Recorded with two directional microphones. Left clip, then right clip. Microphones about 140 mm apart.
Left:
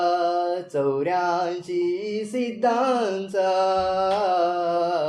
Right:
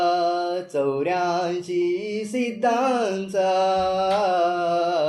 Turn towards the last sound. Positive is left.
turn(degrees=10)  # may be behind; listen again after turning